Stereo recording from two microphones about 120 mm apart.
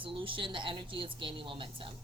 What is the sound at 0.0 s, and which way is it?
A woman's voice, 45° right (ahead or behind).